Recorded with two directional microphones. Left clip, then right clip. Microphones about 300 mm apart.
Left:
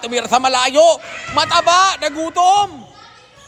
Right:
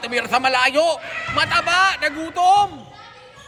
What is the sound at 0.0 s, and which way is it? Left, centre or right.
A man's voice, centre.